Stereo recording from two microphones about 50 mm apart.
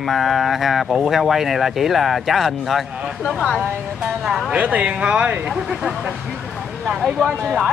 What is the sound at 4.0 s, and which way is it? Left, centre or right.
Speech, centre.